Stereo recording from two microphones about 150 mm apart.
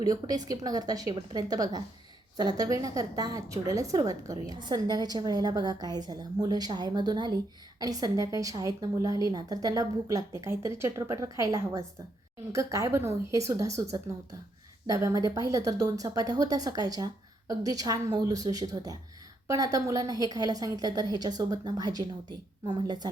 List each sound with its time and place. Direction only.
0.0 s a woman's voice: 25° right (ahead or behind)
14.8 s a woman's voice: 20° right (ahead or behind)